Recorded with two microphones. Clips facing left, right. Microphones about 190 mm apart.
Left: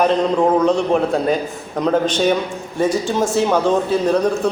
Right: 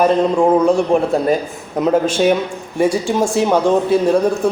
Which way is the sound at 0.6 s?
10° right (ahead or behind).